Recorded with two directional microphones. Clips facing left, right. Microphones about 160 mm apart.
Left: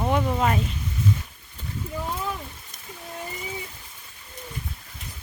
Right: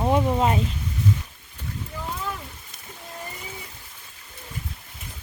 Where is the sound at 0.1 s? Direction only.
25° right (ahead or behind).